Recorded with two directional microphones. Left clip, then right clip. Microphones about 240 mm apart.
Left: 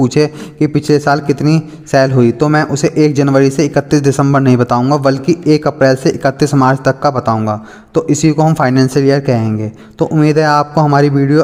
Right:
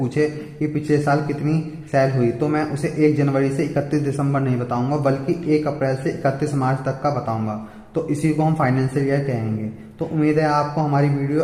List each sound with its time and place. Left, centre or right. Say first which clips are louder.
0.1 s a man's voice: left 8 dB; left